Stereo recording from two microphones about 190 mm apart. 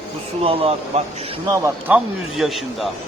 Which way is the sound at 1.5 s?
15° right (ahead or behind).